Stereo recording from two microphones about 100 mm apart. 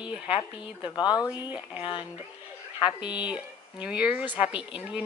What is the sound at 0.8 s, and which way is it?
Speech, 45° left (ahead or behind).